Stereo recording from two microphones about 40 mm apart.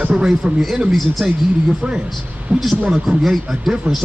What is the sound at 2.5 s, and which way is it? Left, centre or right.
Speech, right.